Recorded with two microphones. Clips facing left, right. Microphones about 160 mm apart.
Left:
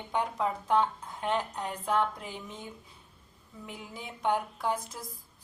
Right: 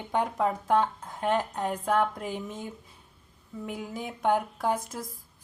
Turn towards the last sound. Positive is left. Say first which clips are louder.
# right 4 dB
turn(degrees=-45)  # may be behind; listen again after turning